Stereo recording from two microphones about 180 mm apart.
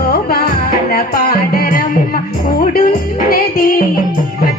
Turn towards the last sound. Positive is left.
turn(degrees=55)  # may be behind; listen again after turning